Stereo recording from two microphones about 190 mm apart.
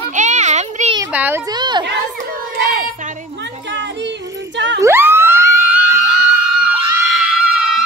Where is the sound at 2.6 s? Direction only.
50° right (ahead or behind).